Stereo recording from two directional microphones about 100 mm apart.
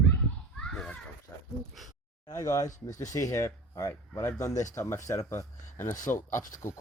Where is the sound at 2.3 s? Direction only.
35° left (ahead or behind).